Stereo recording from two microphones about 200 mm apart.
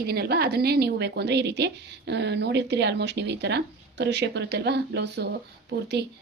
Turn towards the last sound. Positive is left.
turn(degrees=-50)  # may be behind; listen again after turning